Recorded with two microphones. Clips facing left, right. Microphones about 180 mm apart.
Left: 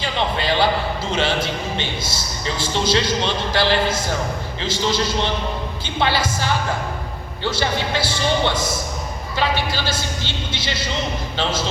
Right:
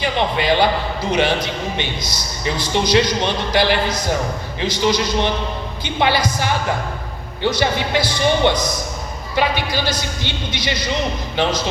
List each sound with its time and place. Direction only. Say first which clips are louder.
0.0 s speech: right 3 dB; 15° right (ahead or behind)